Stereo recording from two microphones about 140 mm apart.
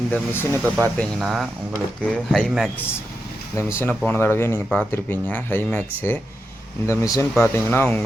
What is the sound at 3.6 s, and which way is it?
Speech, 15° left (ahead or behind).